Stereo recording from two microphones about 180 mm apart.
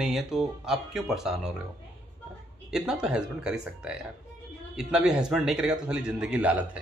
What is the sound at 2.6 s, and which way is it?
A man's voice, 5° right (ahead or behind).